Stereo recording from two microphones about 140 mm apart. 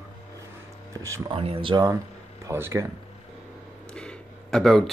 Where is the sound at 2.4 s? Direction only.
20° right (ahead or behind).